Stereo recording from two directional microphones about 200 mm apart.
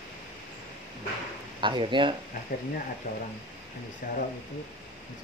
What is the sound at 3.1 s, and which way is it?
Speech, 45° left (ahead or behind).